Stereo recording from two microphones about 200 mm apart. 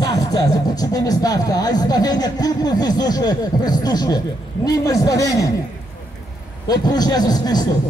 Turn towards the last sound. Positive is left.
turn(degrees=20)  # may be behind; listen again after turning